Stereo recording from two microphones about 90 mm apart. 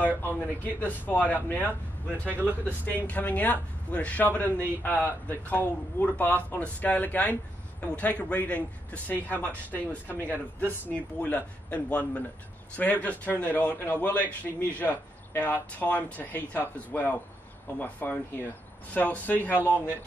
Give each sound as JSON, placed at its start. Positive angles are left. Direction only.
{"t": 0.0, "sound": "a man's voice", "side_deg": 20}
{"t": 2.2, "sound": "speech", "side_deg": -20}
{"t": 3.1, "sound": "a man's voice", "side_deg": 20}
{"t": 19.5, "sound": "speech", "side_deg": -20}